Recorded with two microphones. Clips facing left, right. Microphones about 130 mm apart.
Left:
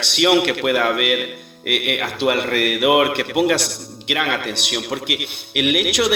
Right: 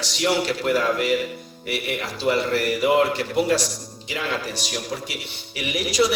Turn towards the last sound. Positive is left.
turn(degrees=65)  # may be behind; listen again after turning